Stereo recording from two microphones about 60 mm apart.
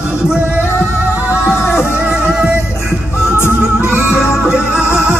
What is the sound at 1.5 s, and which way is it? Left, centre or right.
Music, left.